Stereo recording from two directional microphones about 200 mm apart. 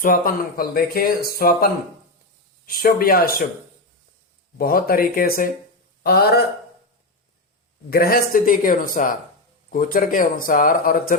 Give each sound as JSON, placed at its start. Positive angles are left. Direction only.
{"t": 0.0, "sound": "speech", "side_deg": 45}
{"t": 4.5, "sound": "speech", "side_deg": 45}
{"t": 7.9, "sound": "speech", "side_deg": 50}